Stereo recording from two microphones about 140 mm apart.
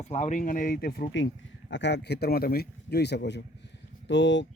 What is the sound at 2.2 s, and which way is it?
Speech, 90° left.